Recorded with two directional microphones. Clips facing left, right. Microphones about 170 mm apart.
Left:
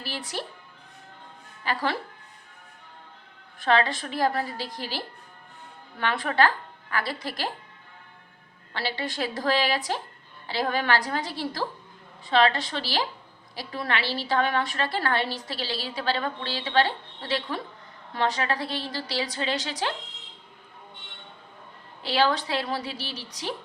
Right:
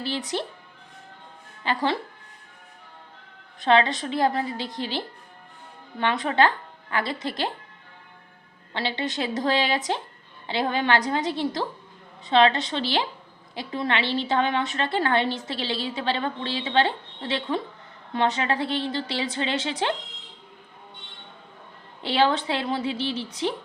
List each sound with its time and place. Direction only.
0.0 s a woman's voice: 20° right (ahead or behind)
1.6 s a woman's voice: 20° right (ahead or behind)
3.6 s a woman's voice: 20° right (ahead or behind)
8.7 s a woman's voice: 20° right (ahead or behind)
22.0 s a woman's voice: 25° right (ahead or behind)